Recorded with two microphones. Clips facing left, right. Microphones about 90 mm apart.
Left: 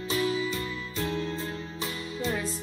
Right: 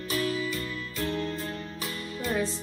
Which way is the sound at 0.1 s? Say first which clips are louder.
Left 2 dB; 20° left (ahead or behind).